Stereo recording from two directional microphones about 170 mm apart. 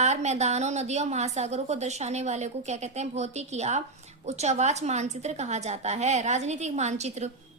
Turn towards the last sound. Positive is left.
turn(degrees=-40)  # may be behind; listen again after turning